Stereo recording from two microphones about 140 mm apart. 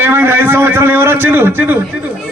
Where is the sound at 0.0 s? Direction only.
15° right (ahead or behind).